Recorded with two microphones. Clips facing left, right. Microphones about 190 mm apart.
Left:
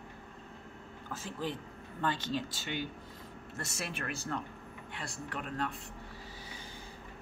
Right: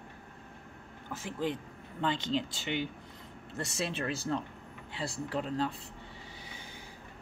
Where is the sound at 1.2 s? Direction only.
20° right (ahead or behind).